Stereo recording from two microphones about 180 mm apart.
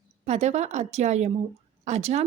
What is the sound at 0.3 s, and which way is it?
Speech, 40° right (ahead or behind).